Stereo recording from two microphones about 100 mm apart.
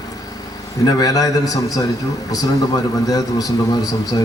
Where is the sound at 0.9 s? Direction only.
40° left (ahead or behind).